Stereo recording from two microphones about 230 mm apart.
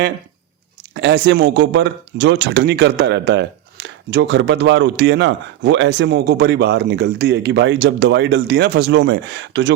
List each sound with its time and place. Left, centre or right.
0.9 s speech: right